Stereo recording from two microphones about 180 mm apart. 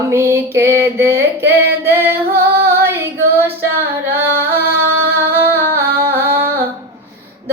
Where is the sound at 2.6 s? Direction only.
60° right (ahead or behind).